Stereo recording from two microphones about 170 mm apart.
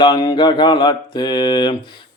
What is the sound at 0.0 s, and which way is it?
Speech, 25° left (ahead or behind).